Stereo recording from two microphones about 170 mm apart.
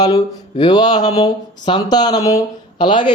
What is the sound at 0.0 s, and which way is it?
A man's voice, 25° left (ahead or behind).